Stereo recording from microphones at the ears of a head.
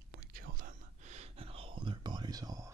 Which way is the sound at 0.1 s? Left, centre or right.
Right.